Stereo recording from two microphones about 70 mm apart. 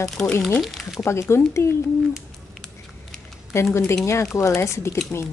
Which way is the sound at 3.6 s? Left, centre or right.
Left.